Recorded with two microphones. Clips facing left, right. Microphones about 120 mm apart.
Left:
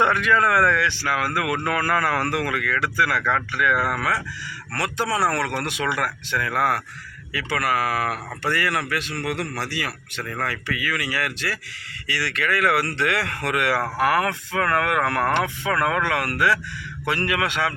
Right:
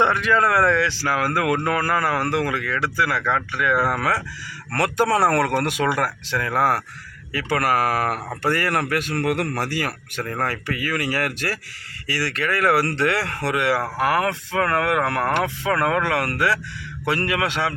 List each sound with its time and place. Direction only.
0.0 s speech: 30° right (ahead or behind)
4.7 s speech: 50° right (ahead or behind); by 17.7 s 30° right (ahead or behind)